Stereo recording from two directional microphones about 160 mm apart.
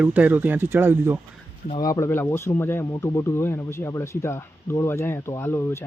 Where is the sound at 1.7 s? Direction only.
25° left (ahead or behind).